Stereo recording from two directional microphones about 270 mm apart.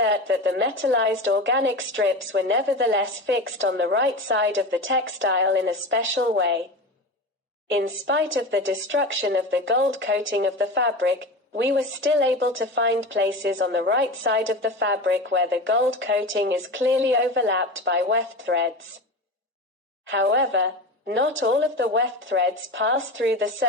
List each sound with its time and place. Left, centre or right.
0.0 s a woman's voice: right
7.7 s a woman's voice: right
20.1 s a woman's voice: right